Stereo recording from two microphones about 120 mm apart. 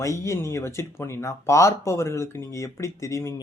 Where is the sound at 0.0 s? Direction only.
25° left (ahead or behind).